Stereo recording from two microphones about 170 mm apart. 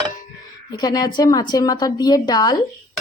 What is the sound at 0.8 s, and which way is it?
A woman's voice, 25° left (ahead or behind).